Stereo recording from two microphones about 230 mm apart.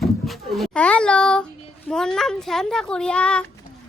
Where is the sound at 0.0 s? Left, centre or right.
Centre.